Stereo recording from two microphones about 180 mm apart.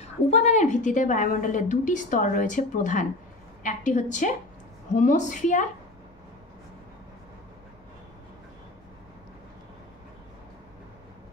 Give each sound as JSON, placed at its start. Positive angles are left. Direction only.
{"t": 0.0, "sound": "a woman's voice", "side_deg": 40}